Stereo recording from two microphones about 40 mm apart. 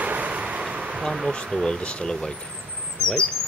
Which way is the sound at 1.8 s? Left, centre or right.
Left.